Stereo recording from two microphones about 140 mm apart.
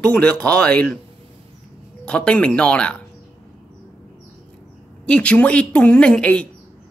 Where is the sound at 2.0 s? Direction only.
10° left (ahead or behind).